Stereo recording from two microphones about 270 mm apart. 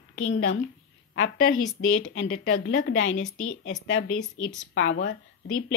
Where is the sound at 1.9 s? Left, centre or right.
Left.